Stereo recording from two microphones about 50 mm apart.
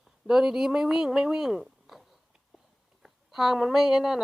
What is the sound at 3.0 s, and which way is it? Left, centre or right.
A woman's voice, centre.